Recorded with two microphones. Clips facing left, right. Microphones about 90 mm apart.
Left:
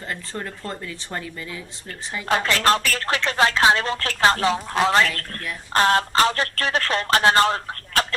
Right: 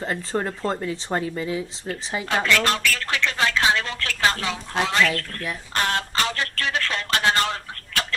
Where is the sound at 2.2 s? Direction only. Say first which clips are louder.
Left 2 dB; 35° left (ahead or behind).